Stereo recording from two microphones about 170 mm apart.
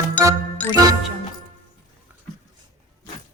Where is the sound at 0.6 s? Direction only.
10° left (ahead or behind).